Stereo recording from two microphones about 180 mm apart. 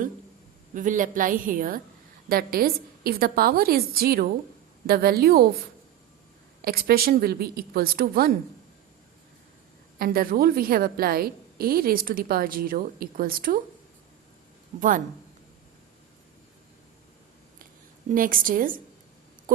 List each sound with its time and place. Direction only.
0.7 s a woman's voice: 45° right (ahead or behind)
10.0 s a woman's voice: 55° right (ahead or behind)
14.8 s a woman's voice: 50° right (ahead or behind)
18.1 s a woman's voice: 50° right (ahead or behind)
19.5 s a sound: 50° right (ahead or behind)